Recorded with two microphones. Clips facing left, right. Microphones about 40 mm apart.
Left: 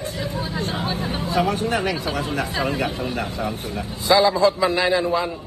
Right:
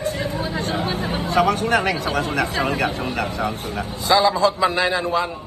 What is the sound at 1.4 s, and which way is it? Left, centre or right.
Speech, right.